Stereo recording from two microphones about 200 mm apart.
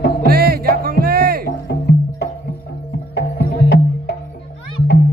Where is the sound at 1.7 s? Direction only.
55° left (ahead or behind).